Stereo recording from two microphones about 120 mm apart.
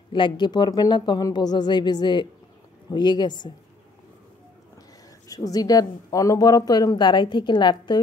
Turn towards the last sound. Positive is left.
turn(degrees=40)  # may be behind; listen again after turning